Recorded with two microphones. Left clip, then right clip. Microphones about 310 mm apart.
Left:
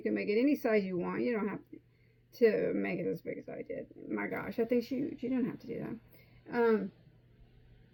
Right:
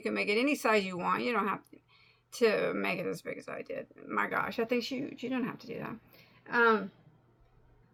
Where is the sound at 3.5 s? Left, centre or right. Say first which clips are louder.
Right 2 dB; right.